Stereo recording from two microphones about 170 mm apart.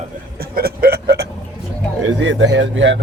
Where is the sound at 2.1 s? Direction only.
90° right.